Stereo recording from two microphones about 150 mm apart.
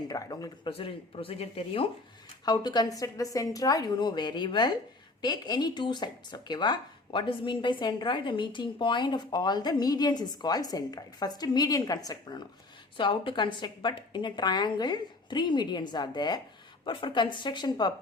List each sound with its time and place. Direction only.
0.1 s speech: 25° left (ahead or behind)
0.7 s speech: 40° left (ahead or behind)
2.4 s speech: 25° left (ahead or behind)